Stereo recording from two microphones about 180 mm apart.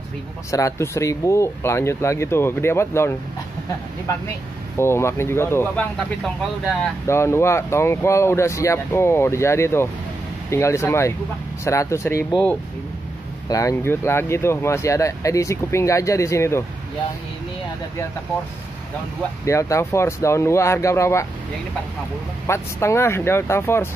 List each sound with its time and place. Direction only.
0.5 s speech: 15° left (ahead or behind)
4.7 s speech: 15° left (ahead or behind)
7.1 s speech: 15° left (ahead or behind)
13.5 s speech: 20° left (ahead or behind)
19.4 s speech: 15° left (ahead or behind)
22.5 s speech: 15° left (ahead or behind)